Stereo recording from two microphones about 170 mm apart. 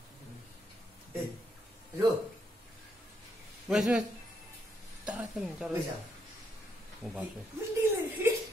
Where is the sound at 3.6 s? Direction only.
5° right (ahead or behind).